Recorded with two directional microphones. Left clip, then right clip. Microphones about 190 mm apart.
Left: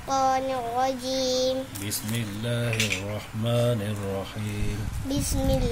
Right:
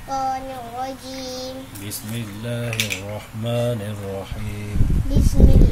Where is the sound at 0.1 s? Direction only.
60° left (ahead or behind).